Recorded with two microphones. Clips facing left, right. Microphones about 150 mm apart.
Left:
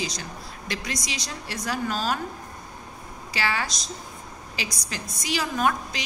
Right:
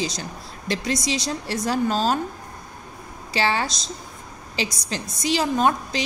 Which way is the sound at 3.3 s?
30° right (ahead or behind).